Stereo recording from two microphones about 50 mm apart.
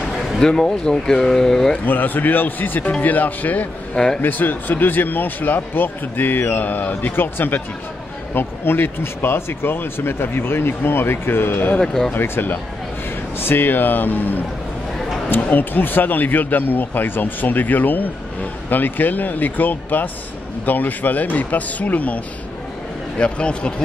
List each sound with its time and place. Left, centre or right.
0.4 s speech: centre
1.9 s speech: left
3.9 s a man's voice: centre
4.2 s speech: left
11.8 s speech: centre
12.1 s a man's voice: left